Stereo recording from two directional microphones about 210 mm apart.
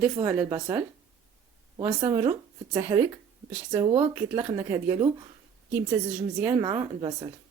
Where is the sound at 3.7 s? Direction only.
25° right (ahead or behind); by 6.5 s 5° right (ahead or behind).